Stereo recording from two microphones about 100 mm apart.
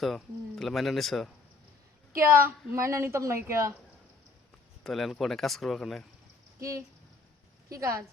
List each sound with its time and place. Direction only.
0.0 s speech: 5° left (ahead or behind)
2.3 s a woman's voice: 25° right (ahead or behind)
4.8 s speech: 5° left (ahead or behind)
6.6 s speech: 30° right (ahead or behind)